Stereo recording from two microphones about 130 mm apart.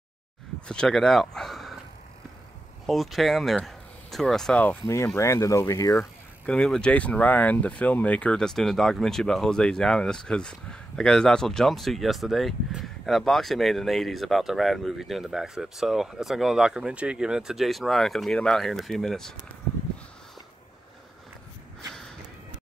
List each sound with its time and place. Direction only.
0.7 s speech: 5° left (ahead or behind)
2.9 s speech: centre (ahead or behind)
4.8 s speech: 20° left (ahead or behind)
6.4 s speech: 5° left (ahead or behind)